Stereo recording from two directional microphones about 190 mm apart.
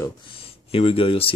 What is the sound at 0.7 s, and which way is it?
Speech, 30° left (ahead or behind).